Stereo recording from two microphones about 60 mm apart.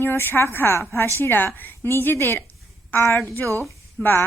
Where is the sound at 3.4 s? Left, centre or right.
Right.